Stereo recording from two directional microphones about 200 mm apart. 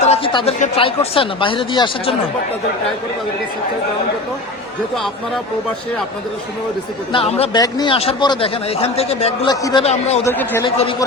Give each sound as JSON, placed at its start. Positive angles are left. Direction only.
{"t": 0.0, "sound": "speech", "side_deg": 30}
{"t": 7.1, "sound": "a man's voice", "side_deg": 30}
{"t": 10.2, "sound": "a man's voice", "side_deg": 15}